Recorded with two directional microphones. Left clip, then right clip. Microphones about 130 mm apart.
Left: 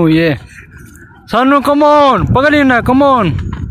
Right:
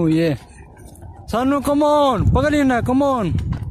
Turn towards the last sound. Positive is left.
turn(degrees=-20)  # may be behind; listen again after turning